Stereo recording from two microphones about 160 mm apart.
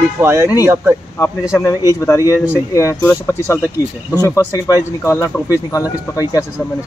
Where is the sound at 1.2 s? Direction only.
20° left (ahead or behind).